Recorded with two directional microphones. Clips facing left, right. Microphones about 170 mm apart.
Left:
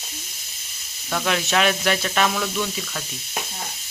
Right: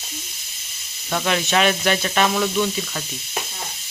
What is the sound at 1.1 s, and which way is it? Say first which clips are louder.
Speech: right 2 dB; centre (ahead or behind).